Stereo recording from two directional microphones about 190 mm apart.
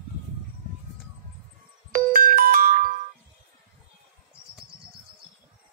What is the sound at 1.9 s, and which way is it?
Music, 45° right (ahead or behind).